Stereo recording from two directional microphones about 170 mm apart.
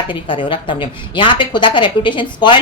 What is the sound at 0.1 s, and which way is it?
A woman's voice, 30° left (ahead or behind).